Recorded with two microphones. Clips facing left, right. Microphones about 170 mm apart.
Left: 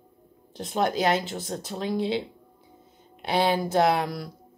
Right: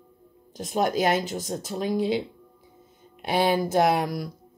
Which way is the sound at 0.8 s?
45° right (ahead or behind).